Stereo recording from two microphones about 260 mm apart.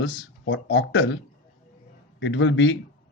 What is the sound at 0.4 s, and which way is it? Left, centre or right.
Speech, left.